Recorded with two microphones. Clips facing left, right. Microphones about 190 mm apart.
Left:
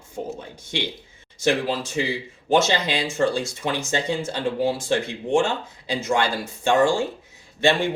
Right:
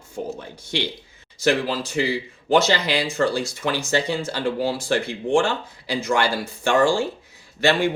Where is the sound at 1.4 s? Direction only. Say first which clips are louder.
Right 1 dB; 25° left (ahead or behind).